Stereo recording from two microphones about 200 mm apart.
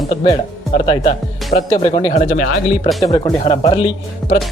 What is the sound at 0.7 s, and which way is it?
Speech, 30° left (ahead or behind).